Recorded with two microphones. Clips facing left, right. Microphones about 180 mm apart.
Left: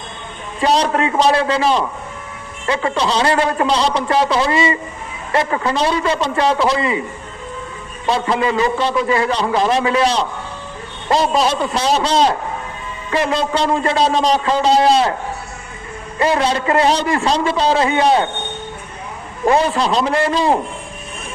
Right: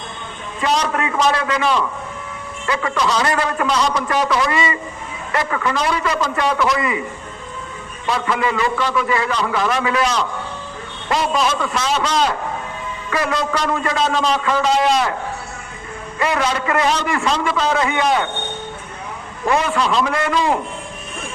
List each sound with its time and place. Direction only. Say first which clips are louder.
0.6 s a man's voice: left 4 dB; 35° left (ahead or behind)
8.0 s a man's voice: left 3 dB; 30° left (ahead or behind)
16.1 s a man's voice: left 3 dB; 30° left (ahead or behind)
19.5 s a man's voice: left 3 dB; 35° left (ahead or behind)